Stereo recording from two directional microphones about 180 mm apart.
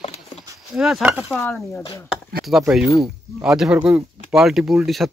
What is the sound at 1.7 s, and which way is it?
Speech, 20° left (ahead or behind).